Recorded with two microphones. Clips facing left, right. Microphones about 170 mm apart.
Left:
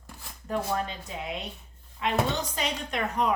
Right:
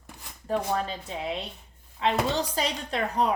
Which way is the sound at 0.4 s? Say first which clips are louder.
Right 2 dB; 30° right (ahead or behind).